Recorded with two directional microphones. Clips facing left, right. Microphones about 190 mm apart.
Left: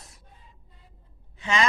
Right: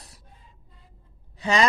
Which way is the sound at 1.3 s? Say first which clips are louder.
Right 4 dB; 35° right (ahead or behind).